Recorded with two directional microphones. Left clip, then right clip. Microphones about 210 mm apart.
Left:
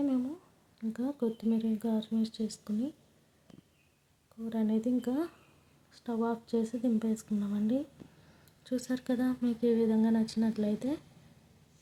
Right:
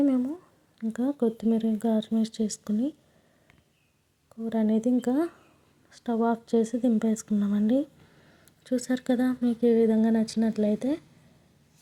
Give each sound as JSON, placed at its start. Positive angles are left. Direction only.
{"t": 0.0, "sound": "a sound", "side_deg": -25}
{"t": 0.8, "sound": "speech", "side_deg": -25}
{"t": 4.4, "sound": "speech", "side_deg": -25}